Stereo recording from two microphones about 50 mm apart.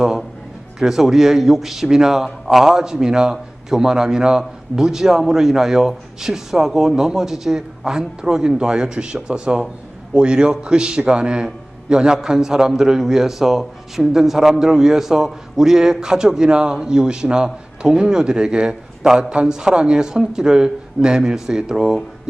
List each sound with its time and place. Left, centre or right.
0.0 s a man's voice: centre